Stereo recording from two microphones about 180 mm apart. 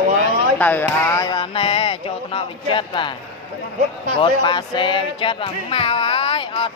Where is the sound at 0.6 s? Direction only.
10° left (ahead or behind); by 3.1 s 25° left (ahead or behind).